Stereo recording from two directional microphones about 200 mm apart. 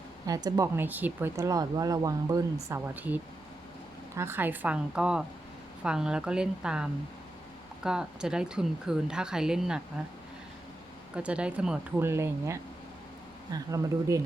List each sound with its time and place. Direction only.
0.3 s speech: 15° right (ahead or behind)
11.1 s speech: 5° right (ahead or behind)